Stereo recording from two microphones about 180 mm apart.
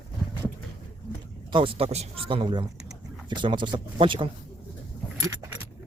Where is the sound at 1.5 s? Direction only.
30° right (ahead or behind).